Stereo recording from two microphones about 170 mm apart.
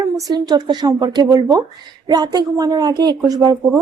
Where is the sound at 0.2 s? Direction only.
25° right (ahead or behind).